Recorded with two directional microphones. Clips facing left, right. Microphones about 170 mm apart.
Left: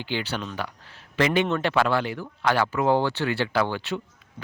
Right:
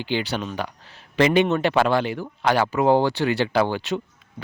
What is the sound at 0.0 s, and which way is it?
Speech, 15° right (ahead or behind).